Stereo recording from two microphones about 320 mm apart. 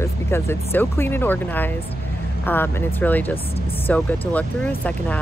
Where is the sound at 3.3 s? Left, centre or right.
Centre.